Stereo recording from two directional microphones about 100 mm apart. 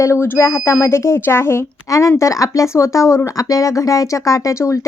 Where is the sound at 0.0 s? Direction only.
25° left (ahead or behind).